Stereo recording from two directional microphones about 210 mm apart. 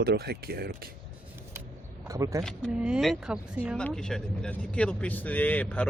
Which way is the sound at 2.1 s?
15° right (ahead or behind).